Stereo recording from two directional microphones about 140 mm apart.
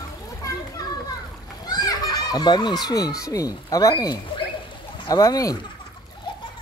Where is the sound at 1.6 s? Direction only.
25° left (ahead or behind).